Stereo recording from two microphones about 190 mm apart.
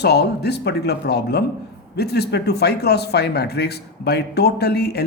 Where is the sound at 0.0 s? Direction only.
60° left (ahead or behind).